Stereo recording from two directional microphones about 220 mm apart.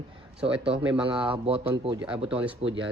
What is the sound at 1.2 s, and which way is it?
Speech, 25° right (ahead or behind).